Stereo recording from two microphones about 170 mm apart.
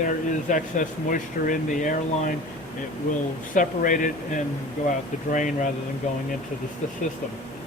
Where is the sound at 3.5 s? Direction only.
50° left (ahead or behind).